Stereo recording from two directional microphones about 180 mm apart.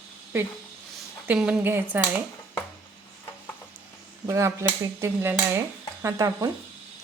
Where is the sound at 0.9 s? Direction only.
5° right (ahead or behind).